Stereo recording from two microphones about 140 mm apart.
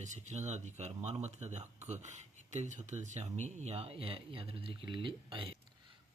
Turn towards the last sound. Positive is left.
turn(degrees=-35)  # may be behind; listen again after turning